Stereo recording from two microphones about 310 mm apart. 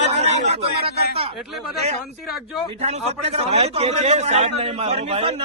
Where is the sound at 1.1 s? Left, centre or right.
Centre.